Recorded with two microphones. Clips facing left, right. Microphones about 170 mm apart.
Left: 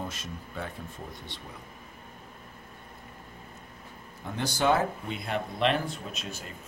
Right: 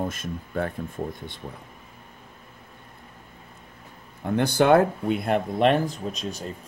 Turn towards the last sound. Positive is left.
turn(degrees=-35)  # may be behind; listen again after turning